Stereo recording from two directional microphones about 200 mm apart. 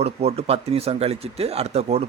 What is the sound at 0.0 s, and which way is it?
A man's voice, 30° right (ahead or behind).